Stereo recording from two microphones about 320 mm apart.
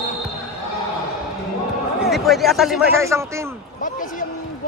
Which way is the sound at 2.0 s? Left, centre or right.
Centre.